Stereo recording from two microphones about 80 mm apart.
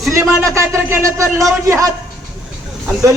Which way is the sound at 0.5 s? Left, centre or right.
Right.